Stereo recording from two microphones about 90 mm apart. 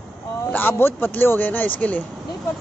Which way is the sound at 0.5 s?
25° left (ahead or behind).